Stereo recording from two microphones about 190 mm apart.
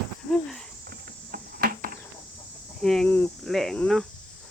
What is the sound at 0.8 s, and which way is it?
Cricket, 50° right (ahead or behind).